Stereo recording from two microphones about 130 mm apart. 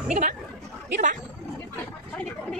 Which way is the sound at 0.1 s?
70° right (ahead or behind).